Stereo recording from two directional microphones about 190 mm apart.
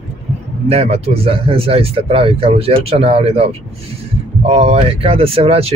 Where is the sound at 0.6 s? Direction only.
35° right (ahead or behind).